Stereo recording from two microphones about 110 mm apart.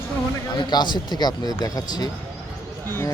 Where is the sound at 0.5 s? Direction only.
40° left (ahead or behind).